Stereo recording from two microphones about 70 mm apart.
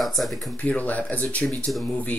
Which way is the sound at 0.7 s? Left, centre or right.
Left.